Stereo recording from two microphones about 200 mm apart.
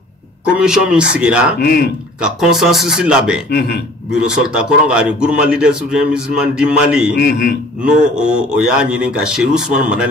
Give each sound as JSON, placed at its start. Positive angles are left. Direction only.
{"t": 0.6, "sound": "speech", "side_deg": -5}
{"t": 3.4, "sound": "a man's voice", "side_deg": 55}
{"t": 4.1, "sound": "speech", "side_deg": -5}
{"t": 7.2, "sound": "a man's voice", "side_deg": 50}
{"t": 8.2, "sound": "speech", "side_deg": -5}